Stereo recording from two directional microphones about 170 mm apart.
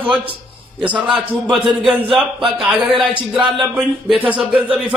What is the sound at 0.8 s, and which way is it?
A man's voice, 10° right (ahead or behind).